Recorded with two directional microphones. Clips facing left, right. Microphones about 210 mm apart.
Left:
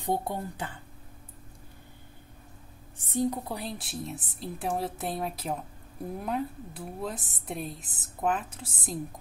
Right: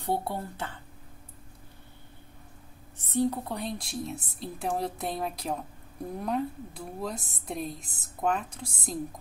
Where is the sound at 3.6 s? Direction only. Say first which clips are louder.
Right 2 dB; 5° left (ahead or behind).